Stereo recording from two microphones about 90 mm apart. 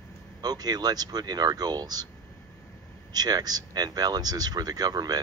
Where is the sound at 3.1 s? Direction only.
50° right (ahead or behind).